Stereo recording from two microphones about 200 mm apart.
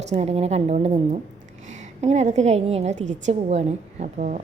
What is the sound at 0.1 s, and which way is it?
A woman's voice, 35° right (ahead or behind).